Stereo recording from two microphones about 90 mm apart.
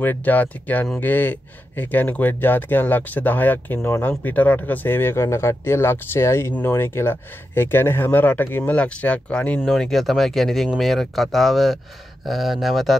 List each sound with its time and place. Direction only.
0.0 s speech: 20° left (ahead or behind)
9.6 s speech: centre (ahead or behind)